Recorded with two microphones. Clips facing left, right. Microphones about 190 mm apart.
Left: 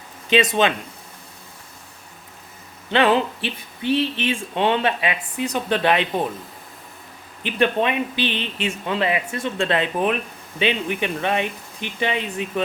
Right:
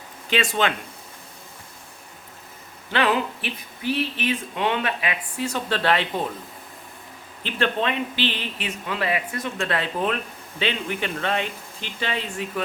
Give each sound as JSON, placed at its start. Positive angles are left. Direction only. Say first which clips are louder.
{"t": 0.3, "sound": "speech", "louder": "left 5 dB", "side_deg": 20}
{"t": 2.9, "sound": "speech", "louder": "left 4 dB", "side_deg": 25}
{"t": 7.4, "sound": "speech", "louder": "left 4 dB", "side_deg": 15}